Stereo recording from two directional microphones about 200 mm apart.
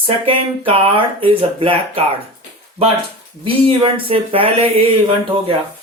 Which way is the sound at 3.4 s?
25° right (ahead or behind).